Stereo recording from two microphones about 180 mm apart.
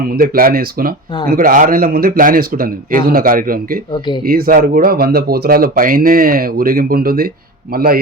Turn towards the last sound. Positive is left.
turn(degrees=-55)  # may be behind; listen again after turning